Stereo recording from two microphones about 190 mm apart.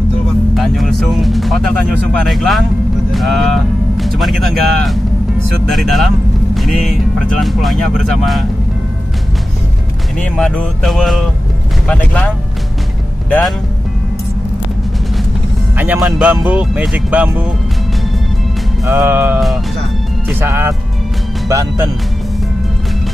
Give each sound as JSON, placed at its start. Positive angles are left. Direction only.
{"t": 0.6, "sound": "music", "side_deg": 0}
{"t": 2.2, "sound": "speech", "side_deg": 0}
{"t": 10.3, "sound": "speech", "side_deg": 5}
{"t": 15.8, "sound": "speech", "side_deg": -10}
{"t": 18.9, "sound": "speech", "side_deg": -15}